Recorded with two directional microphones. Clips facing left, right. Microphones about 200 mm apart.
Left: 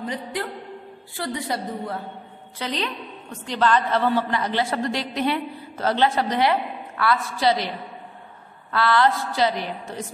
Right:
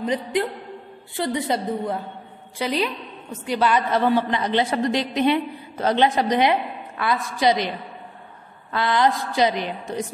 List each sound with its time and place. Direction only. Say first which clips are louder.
0.0 s a woman's voice: right 6 dB; 20° right (ahead or behind)
2.6 s a woman's voice: right 4 dB; 10° right (ahead or behind)
8.7 s a woman's voice: even; 15° right (ahead or behind)